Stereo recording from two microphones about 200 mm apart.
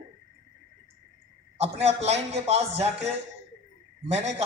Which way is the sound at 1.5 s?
30° right (ahead or behind).